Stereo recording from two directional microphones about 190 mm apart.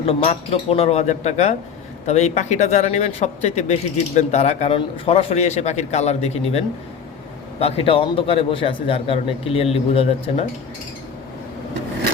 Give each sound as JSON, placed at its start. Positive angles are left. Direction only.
{"t": 0.0, "sound": "a man's voice", "side_deg": 30}